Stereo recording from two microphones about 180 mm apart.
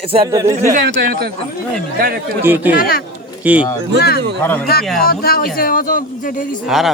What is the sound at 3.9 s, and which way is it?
Speech, 60° left (ahead or behind).